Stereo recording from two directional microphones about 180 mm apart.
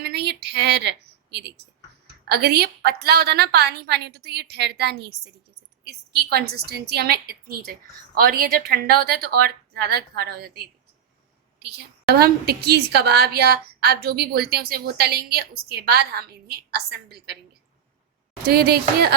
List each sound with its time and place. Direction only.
0.0 s a sound: 65° right (ahead or behind)
2.2 s a woman's voice: 65° right (ahead or behind)
12.1 s a woman's voice: 60° right (ahead or behind)
18.4 s a woman's voice: 60° right (ahead or behind)